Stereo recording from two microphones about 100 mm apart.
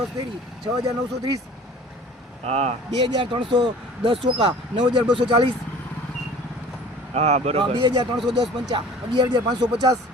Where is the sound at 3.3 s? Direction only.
55° right (ahead or behind).